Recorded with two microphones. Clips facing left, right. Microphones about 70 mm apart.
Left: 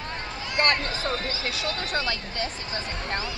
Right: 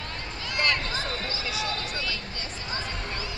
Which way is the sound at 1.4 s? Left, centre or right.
Left.